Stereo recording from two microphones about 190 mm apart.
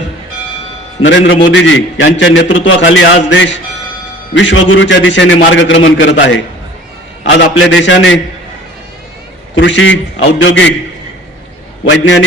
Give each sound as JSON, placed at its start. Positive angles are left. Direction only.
{"t": 1.0, "sound": "a man's voice", "side_deg": 75}
{"t": 9.6, "sound": "a man's voice", "side_deg": 75}
{"t": 11.9, "sound": "a man's voice", "side_deg": 75}